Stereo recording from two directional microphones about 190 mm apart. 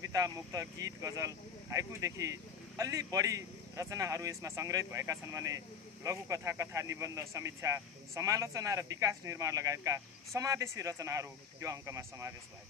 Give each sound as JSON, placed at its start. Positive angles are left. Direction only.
{"t": 0.0, "sound": "speech", "side_deg": -15}